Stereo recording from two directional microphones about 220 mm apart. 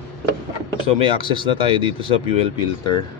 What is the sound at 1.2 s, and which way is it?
Speech, 25° left (ahead or behind).